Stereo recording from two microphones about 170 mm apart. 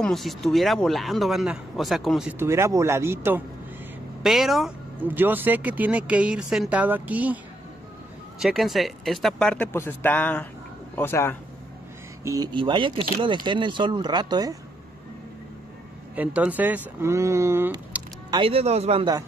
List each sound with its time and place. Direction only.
0.0 s speech: centre (ahead or behind)
2.3 s speech: 15° right (ahead or behind)
4.2 s speech: centre (ahead or behind)
8.4 s speech: centre (ahead or behind); by 11.3 s 15° left (ahead or behind)
12.2 s speech: 15° right (ahead or behind)
12.5 s speech: 30° right (ahead or behind)
16.2 s speech: 10° right (ahead or behind)
18.3 s speech: 30° right (ahead or behind)